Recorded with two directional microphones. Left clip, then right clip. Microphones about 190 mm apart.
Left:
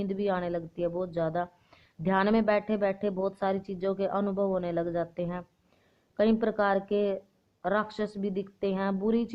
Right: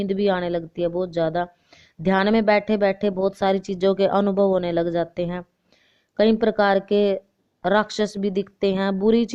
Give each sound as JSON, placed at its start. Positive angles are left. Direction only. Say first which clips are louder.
{"t": 0.0, "sound": "a woman's voice", "louder": "right 8 dB", "side_deg": -45}